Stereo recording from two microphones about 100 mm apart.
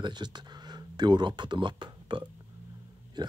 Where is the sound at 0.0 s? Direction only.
45° right (ahead or behind).